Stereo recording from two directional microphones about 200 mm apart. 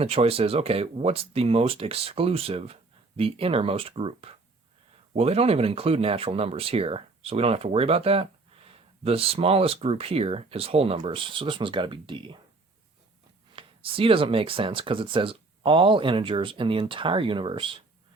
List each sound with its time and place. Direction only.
0.0 s speech: 30° right (ahead or behind)
13.6 s speech: 25° right (ahead or behind)